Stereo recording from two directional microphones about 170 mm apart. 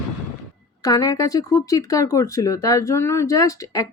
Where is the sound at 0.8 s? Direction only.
20° left (ahead or behind).